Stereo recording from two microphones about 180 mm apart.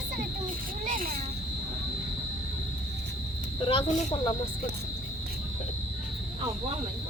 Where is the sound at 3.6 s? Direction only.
30° left (ahead or behind).